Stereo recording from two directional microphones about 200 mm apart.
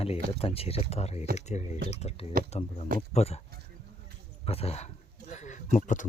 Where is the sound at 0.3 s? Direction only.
30° left (ahead or behind).